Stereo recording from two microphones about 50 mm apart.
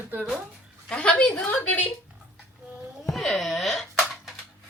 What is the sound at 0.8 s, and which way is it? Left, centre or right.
Speech, left.